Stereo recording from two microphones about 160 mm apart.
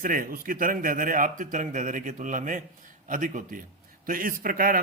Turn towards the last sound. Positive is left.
turn(degrees=-60)  # may be behind; listen again after turning